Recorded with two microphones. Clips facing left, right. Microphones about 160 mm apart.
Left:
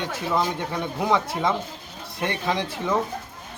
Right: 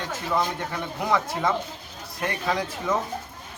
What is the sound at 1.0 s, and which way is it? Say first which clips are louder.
A man's voice: left 1 dB; 20° left (ahead or behind).